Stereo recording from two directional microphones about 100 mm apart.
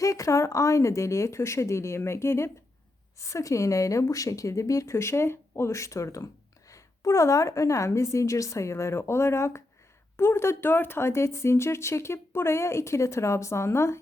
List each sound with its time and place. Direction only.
0.0 s speech: 30° left (ahead or behind)